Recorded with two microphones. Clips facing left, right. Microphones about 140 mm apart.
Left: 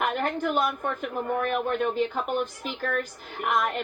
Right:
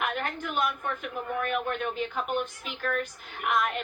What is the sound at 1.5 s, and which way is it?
Speech, 40° left (ahead or behind).